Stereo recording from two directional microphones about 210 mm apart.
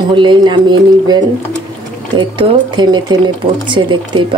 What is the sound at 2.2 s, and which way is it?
Speech, 20° right (ahead or behind).